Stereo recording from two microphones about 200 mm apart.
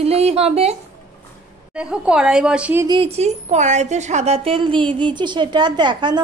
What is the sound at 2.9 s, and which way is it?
A woman's voice, 30° right (ahead or behind).